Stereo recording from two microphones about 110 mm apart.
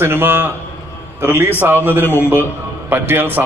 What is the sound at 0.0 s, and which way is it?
Speech, 20° right (ahead or behind).